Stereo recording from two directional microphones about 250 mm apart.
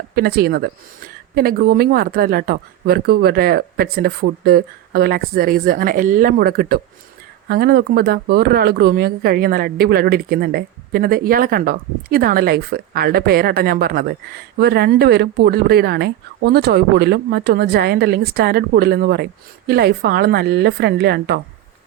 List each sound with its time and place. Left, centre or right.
0.2 s speech: right